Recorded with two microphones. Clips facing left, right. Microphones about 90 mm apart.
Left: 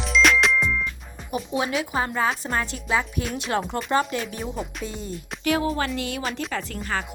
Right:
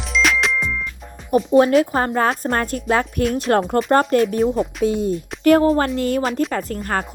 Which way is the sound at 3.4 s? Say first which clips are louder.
Right 8 dB; 50° right (ahead or behind).